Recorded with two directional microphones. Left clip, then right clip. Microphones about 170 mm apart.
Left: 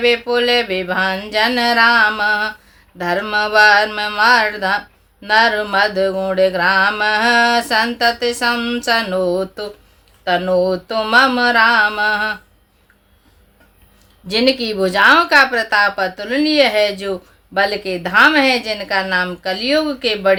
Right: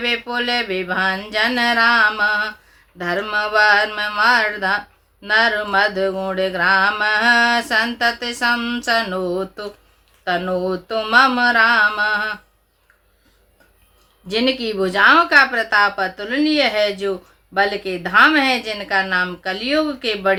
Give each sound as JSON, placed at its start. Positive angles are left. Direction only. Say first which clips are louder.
{"t": 0.0, "sound": "speech", "louder": "left 6 dB", "side_deg": 30}
{"t": 14.3, "sound": "speech", "louder": "left 4 dB", "side_deg": 30}